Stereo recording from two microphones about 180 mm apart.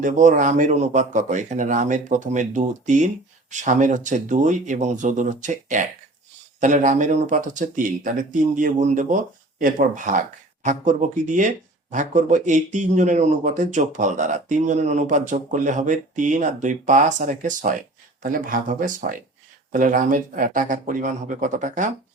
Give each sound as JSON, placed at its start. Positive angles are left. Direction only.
{"t": 0.0, "sound": "speech", "side_deg": -45}